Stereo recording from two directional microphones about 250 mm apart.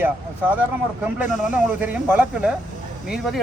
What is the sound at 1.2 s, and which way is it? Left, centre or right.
Speech, centre.